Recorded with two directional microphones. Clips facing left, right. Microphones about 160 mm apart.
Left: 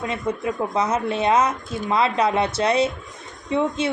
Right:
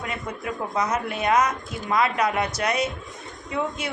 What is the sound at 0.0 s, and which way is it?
A woman's voice, 25° left (ahead or behind).